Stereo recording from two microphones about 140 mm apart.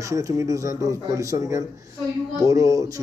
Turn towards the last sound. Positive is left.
turn(degrees=-25)  # may be behind; listen again after turning